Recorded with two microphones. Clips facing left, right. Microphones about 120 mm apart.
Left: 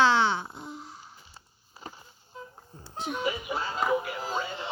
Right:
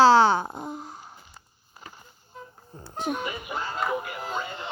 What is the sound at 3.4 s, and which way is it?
Music, centre (ahead or behind).